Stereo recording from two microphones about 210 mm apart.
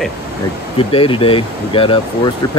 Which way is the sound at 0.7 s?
25° left (ahead or behind).